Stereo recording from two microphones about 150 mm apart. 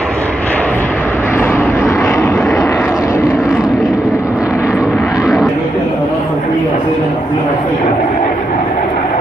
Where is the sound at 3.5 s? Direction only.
5° right (ahead or behind).